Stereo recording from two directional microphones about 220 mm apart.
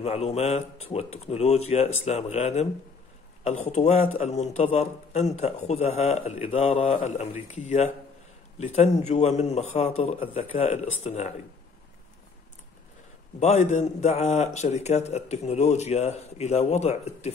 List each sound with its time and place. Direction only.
0.0 s a man's voice: 30° left (ahead or behind)
3.7 s a man's voice: 30° left (ahead or behind)
13.4 s a man's voice: 30° left (ahead or behind)